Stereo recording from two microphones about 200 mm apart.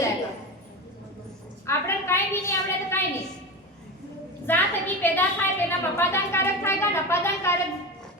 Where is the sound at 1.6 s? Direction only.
15° left (ahead or behind).